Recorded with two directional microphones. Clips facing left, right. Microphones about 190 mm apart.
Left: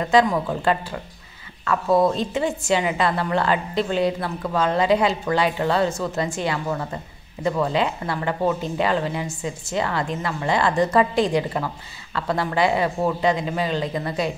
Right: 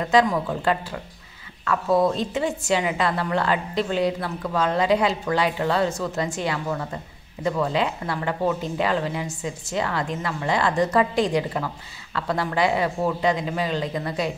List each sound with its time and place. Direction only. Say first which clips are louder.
0.0 s speech: left 1 dB; 25° left (ahead or behind)